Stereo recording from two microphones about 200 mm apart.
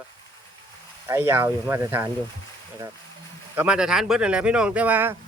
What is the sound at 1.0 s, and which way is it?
Speech, 10° right (ahead or behind).